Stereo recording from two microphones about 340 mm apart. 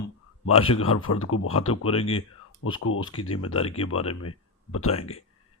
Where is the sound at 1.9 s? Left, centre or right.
Centre.